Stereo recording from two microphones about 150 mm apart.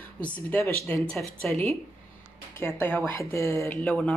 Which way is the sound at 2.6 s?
15° left (ahead or behind).